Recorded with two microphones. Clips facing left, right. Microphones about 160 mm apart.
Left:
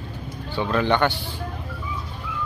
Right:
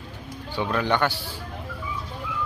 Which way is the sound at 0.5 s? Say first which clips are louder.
Left 3 dB; 10° right (ahead or behind).